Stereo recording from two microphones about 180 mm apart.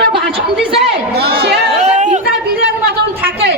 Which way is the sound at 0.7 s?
65° right (ahead or behind).